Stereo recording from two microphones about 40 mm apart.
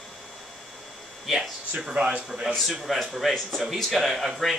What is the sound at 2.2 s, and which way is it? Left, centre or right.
Speech, centre.